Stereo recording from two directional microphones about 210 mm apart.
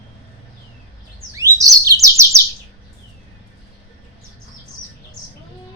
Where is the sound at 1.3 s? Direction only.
15° right (ahead or behind).